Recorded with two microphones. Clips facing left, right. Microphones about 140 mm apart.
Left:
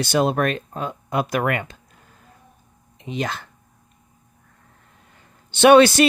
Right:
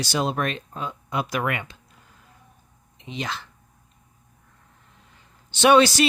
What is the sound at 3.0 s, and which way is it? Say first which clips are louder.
Speech: left 5 dB; 50° left (ahead or behind).